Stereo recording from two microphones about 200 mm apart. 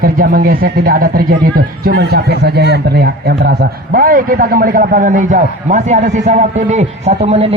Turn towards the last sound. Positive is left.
turn(degrees=-30)  # may be behind; listen again after turning